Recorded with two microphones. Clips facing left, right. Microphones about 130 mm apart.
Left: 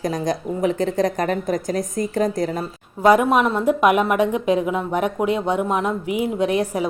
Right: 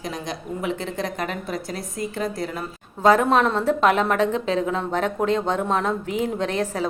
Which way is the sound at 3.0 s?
10° left (ahead or behind).